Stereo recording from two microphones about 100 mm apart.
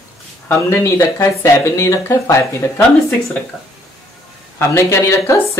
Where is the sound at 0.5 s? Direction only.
25° left (ahead or behind).